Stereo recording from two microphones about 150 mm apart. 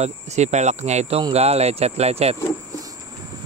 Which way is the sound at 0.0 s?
50° right (ahead or behind).